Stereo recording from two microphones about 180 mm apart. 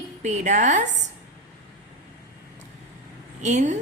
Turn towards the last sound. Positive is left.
turn(degrees=-40)  # may be behind; listen again after turning